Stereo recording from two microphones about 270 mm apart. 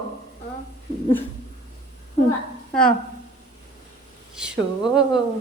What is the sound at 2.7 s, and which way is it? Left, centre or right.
Speech, centre.